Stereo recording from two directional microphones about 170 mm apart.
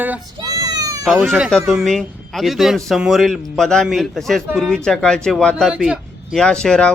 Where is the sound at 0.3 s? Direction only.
20° right (ahead or behind).